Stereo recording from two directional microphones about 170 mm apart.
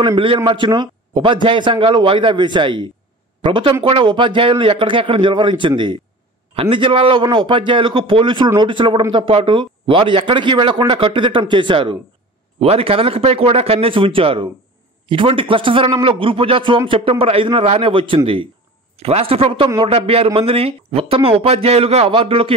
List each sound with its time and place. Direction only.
0.0 s a man's voice: 30° right (ahead or behind)